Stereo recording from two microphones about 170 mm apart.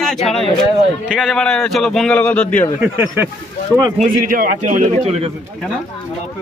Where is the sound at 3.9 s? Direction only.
50° right (ahead or behind).